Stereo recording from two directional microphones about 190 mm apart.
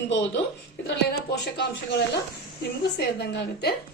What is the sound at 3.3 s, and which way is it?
Speech, 60° left (ahead or behind).